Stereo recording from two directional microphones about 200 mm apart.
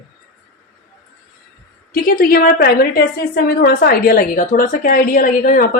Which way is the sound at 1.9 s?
45° left (ahead or behind).